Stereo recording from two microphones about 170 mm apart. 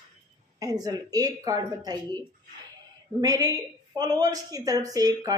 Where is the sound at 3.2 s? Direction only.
20° right (ahead or behind).